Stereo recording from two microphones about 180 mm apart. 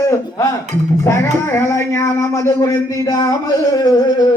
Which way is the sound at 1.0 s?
15° left (ahead or behind).